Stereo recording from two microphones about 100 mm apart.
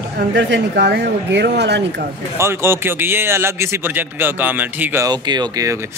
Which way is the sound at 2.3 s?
25° right (ahead or behind).